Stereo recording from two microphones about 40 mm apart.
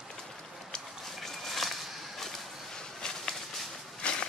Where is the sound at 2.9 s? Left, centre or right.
Centre.